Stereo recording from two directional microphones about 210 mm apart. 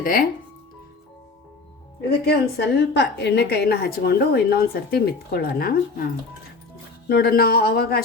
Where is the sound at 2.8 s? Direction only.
55° left (ahead or behind).